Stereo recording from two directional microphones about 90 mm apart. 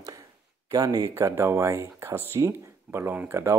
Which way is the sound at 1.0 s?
30° right (ahead or behind).